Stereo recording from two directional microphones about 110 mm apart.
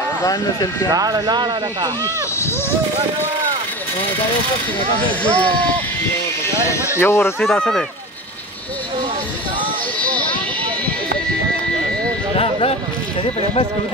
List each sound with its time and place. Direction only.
0.2 s speech: 35° left (ahead or behind)
0.8 s speech: 35° right (ahead or behind)
5.2 s speech: 10° left (ahead or behind)
6.7 s speech: 25° left (ahead or behind)
7.3 s speech: 10° left (ahead or behind)
12.4 s speech: 60° left (ahead or behind)